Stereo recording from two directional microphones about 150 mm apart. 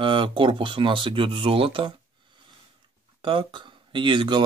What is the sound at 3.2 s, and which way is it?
Speech, 35° right (ahead or behind).